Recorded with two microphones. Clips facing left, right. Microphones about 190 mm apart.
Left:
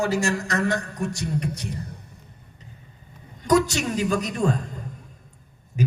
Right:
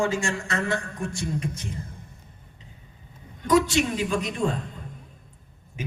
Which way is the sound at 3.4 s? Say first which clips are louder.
Even; 40° left (ahead or behind).